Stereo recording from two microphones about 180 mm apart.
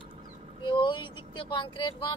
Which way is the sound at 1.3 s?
25° left (ahead or behind).